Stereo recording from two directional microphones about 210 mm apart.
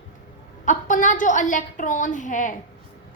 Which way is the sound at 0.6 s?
35° left (ahead or behind).